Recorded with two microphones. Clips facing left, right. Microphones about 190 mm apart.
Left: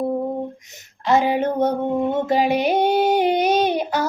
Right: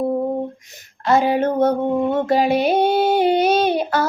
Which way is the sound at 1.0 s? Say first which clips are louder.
Right 2 dB; 15° left (ahead or behind).